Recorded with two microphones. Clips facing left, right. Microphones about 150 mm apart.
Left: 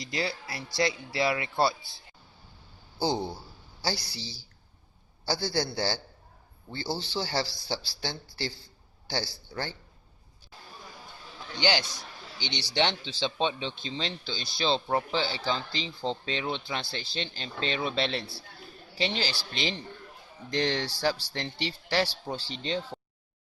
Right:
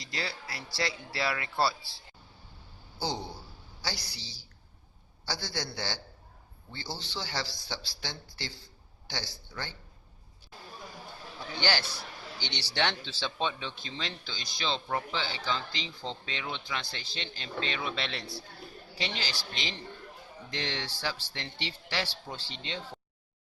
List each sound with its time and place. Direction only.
0.2 s speech: 25° left (ahead or behind)
3.0 s speech: 30° left (ahead or behind)
11.6 s a man's voice: 15° left (ahead or behind); by 22.8 s 35° left (ahead or behind)